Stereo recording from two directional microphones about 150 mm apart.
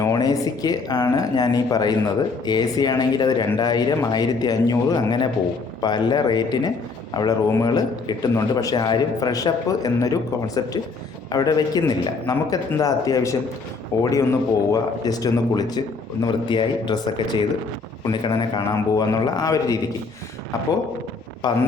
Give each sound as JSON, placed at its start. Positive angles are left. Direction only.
{"t": 0.0, "sound": "speech", "side_deg": 25}
{"t": 21.4, "sound": "speech", "side_deg": 30}